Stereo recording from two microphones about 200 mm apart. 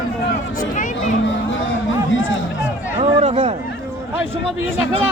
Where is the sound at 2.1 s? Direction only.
75° left (ahead or behind).